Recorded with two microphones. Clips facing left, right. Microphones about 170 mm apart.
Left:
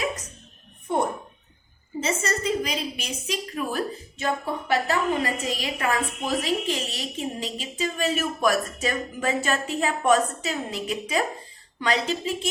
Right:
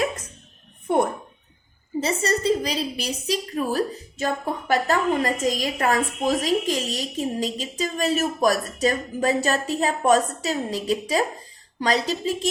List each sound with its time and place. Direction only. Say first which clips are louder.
2.0 s a woman's voice: right 3 dB; 35° right (ahead or behind)